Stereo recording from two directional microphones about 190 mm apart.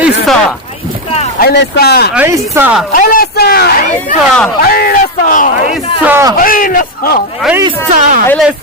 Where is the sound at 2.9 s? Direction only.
50° left (ahead or behind).